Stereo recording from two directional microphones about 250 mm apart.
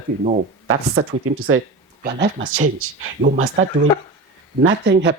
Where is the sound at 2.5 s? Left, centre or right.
Right.